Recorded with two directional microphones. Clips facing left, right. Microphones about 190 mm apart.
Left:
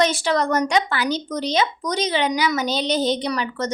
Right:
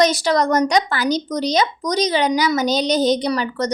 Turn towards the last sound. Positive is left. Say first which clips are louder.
# right 4 dB
turn(degrees=-40)  # may be behind; listen again after turning